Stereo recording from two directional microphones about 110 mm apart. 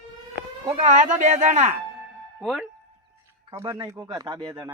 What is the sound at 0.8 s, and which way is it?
Speech, 90° right.